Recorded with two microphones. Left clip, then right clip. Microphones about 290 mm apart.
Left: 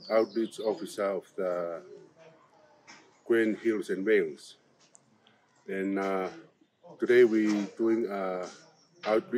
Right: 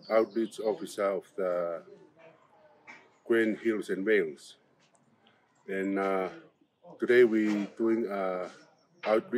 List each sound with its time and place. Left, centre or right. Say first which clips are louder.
0.1 s speech: even; centre
2.9 s a sound: right 3 dB; right
3.3 s speech: left 1 dB; centre
5.7 s speech: right 1 dB; centre